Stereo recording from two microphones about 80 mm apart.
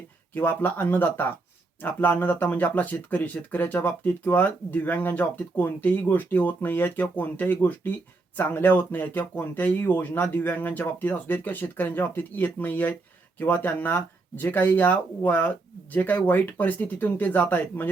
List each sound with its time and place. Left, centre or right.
0.3 s speech: left